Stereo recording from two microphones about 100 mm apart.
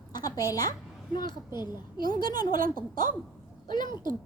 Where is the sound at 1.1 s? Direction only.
50° left (ahead or behind).